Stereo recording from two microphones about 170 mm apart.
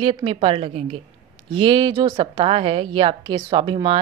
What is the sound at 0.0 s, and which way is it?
A woman's voice, 35° right (ahead or behind).